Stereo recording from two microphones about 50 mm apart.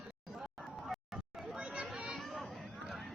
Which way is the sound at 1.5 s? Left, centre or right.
Right.